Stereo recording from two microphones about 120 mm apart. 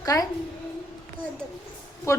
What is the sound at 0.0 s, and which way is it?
Speech, 30° left (ahead or behind).